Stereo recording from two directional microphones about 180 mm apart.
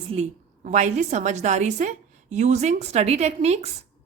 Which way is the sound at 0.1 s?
40° right (ahead or behind).